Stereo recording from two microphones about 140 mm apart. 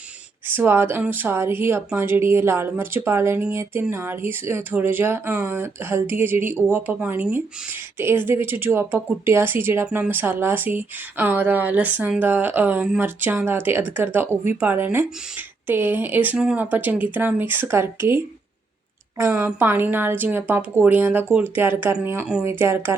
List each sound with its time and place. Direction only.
0.4 s speech: 15° right (ahead or behind)
19.3 s speech: 10° right (ahead or behind)